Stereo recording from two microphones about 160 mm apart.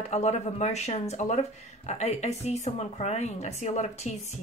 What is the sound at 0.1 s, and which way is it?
Speech, 45° left (ahead or behind).